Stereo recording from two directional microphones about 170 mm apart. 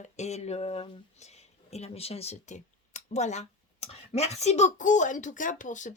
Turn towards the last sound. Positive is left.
turn(degrees=50)  # may be behind; listen again after turning